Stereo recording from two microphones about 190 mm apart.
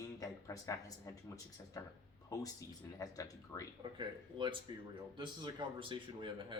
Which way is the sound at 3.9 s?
25° right (ahead or behind).